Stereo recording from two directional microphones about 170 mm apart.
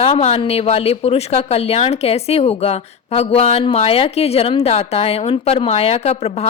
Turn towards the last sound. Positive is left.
turn(degrees=40)  # may be behind; listen again after turning